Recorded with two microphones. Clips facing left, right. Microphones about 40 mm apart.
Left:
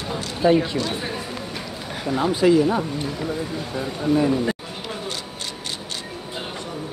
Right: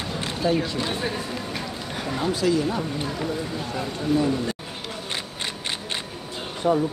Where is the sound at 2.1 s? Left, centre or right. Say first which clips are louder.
Left 5 dB; centre.